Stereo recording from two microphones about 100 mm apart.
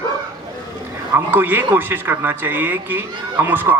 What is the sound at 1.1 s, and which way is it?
Speech, 20° right (ahead or behind).